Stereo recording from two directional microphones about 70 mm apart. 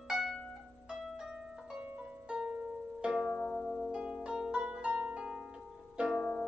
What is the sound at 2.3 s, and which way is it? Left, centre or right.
Music, centre.